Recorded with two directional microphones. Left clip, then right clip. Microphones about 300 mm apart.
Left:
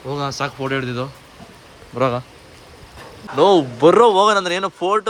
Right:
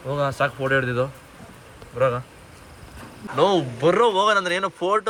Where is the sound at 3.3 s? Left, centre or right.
Centre.